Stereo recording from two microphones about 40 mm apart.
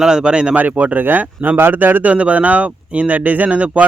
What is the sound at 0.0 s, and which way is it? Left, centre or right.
Speech, centre.